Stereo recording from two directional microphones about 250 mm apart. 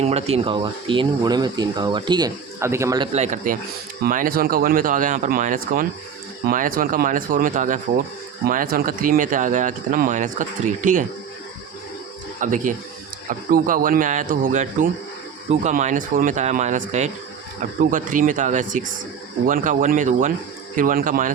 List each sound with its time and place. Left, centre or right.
0.0 s speech: right
3.1 s speech: right
12.4 s speech: right